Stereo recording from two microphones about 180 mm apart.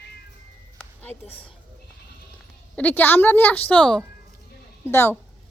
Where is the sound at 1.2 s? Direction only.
35° left (ahead or behind).